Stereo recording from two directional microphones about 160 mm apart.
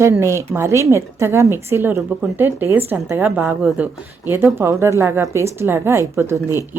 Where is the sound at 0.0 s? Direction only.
15° right (ahead or behind).